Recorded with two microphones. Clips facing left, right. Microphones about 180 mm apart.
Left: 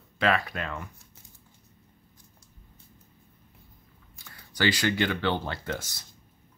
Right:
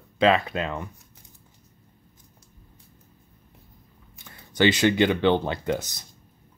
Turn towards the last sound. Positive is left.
turn(degrees=-20)  # may be behind; listen again after turning